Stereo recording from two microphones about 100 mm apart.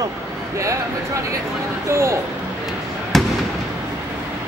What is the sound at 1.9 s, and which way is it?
Speech, 25° right (ahead or behind).